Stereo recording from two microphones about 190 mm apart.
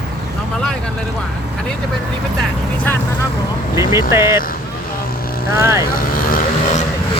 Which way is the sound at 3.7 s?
15° right (ahead or behind).